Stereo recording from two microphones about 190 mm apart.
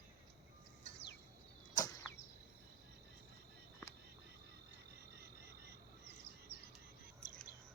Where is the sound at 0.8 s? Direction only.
65° left (ahead or behind).